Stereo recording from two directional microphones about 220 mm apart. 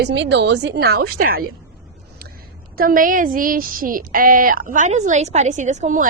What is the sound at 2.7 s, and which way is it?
Speech, 40° right (ahead or behind).